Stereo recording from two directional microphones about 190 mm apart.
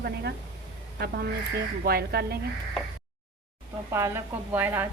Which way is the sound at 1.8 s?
55° right (ahead or behind).